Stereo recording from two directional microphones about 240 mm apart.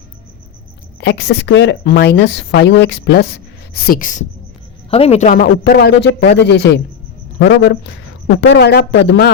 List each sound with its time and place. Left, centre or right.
1.0 s a man's voice: left